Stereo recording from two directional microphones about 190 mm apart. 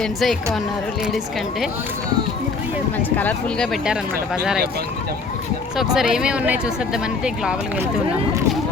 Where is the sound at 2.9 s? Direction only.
10° left (ahead or behind).